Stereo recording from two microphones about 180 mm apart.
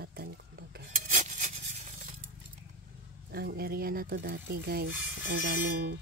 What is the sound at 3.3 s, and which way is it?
Speech, 60° right (ahead or behind).